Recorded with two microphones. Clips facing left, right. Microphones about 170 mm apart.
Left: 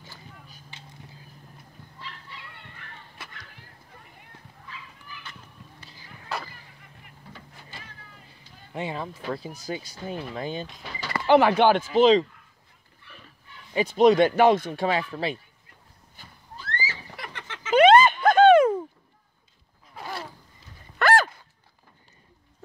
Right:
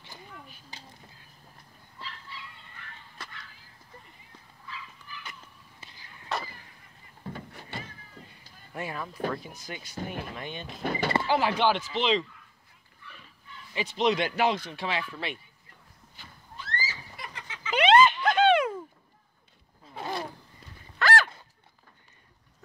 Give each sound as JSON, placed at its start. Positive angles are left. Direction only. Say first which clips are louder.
{"t": 0.7, "sound": "a sound", "louder": "right 1 dB", "side_deg": -40}
{"t": 6.2, "sound": "artillery fire", "louder": "even", "side_deg": 0}
{"t": 7.2, "sound": "vehicle", "louder": "right 8 dB", "side_deg": -50}
{"t": 7.7, "sound": "vehicle", "louder": "right 7 dB", "side_deg": -65}
{"t": 8.7, "sound": "speech", "louder": "left 4 dB", "side_deg": 25}
{"t": 10.8, "sound": "power windows", "louder": "right 9 dB", "side_deg": -50}
{"t": 11.2, "sound": "speech", "louder": "left 10 dB", "side_deg": 60}
{"t": 13.7, "sound": "speech", "louder": "left 9 dB", "side_deg": 45}
{"t": 16.8, "sound": "a sound", "louder": "left 4 dB", "side_deg": 65}
{"t": 17.6, "sound": "a sound", "louder": "left 5 dB", "side_deg": 45}
{"t": 20.0, "sound": "roaring cats", "louder": "right 2 dB", "side_deg": -20}
{"t": 21.0, "sound": "a sound", "louder": "left 5 dB", "side_deg": 60}